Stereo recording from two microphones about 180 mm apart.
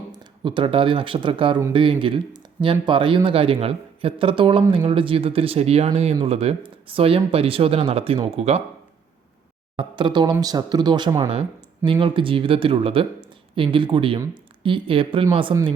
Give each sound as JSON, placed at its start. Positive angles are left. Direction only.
{"t": 0.1, "sound": "speech", "side_deg": -25}
{"t": 9.7, "sound": "speech", "side_deg": -25}